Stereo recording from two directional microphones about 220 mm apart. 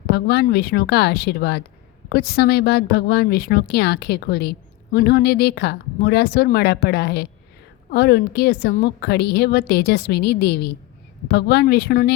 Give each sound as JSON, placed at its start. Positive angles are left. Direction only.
{"t": 0.1, "sound": "a woman's voice", "side_deg": 45}